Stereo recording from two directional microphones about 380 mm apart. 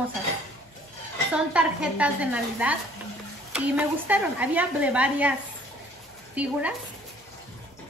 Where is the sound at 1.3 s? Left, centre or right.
Centre.